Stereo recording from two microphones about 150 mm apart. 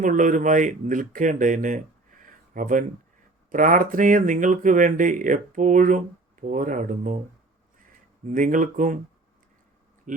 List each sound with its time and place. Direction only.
0.0 s speech: 60° right (ahead or behind)
8.3 s speech: 60° right (ahead or behind)
10.1 s speech: 60° right (ahead or behind)